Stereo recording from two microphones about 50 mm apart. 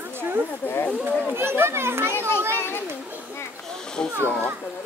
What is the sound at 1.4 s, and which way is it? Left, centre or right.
Speech, right.